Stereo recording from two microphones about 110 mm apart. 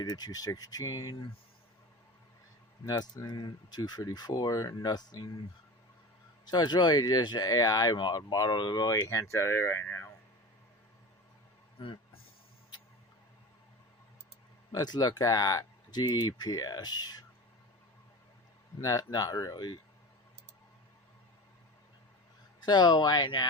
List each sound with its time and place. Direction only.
0.0 s speech: 40° left (ahead or behind)
2.8 s speech: 35° left (ahead or behind)
6.4 s speech: 40° left (ahead or behind); by 10.1 s 20° left (ahead or behind)
11.8 s a sound: 55° left (ahead or behind)
14.7 s speech: 35° left (ahead or behind)
18.8 s speech: 30° left (ahead or behind)
22.6 s speech: 40° left (ahead or behind)